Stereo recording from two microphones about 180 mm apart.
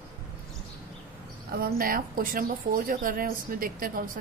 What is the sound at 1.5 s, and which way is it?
Speech, 55° right (ahead or behind).